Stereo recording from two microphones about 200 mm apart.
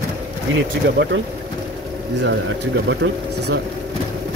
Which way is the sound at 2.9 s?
60° right (ahead or behind).